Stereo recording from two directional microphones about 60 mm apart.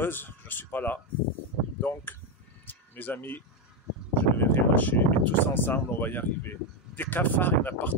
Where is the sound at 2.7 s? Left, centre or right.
Left.